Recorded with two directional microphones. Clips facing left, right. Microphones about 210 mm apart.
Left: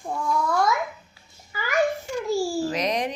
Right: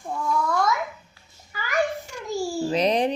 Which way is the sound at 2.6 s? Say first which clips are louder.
Right 4 dB; 30° right (ahead or behind).